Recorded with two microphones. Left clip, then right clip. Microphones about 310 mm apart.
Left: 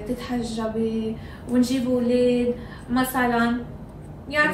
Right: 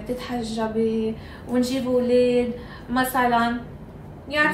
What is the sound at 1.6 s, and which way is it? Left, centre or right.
A woman's voice, right.